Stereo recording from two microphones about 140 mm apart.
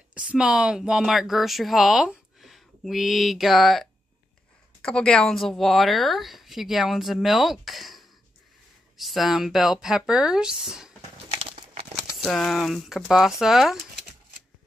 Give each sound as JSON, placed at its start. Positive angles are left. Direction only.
{"t": 0.1, "sound": "a woman's voice", "side_deg": -10}
{"t": 11.2, "sound": "a sound", "side_deg": -45}
{"t": 12.3, "sound": "a woman's voice", "side_deg": 0}